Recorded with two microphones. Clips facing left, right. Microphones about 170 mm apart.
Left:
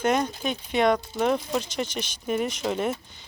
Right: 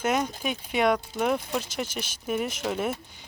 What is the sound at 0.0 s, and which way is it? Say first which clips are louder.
Speech: left 2 dB; 5° right (ahead or behind).